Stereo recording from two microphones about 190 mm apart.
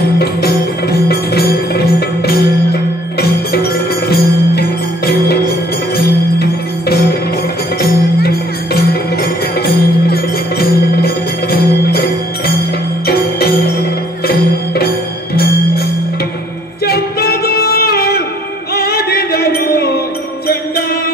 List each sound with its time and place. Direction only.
0.2 s music: 55° left (ahead or behind)
16.8 s singing: 55° left (ahead or behind)
18.8 s music: 55° left (ahead or behind)